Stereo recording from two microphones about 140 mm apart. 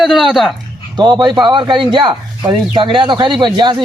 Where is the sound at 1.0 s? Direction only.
30° right (ahead or behind).